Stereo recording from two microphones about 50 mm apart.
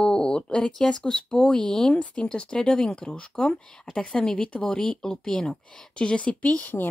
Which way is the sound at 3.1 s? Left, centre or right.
Left.